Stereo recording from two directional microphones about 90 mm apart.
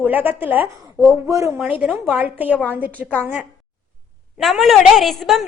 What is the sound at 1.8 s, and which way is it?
A woman's voice, 15° right (ahead or behind).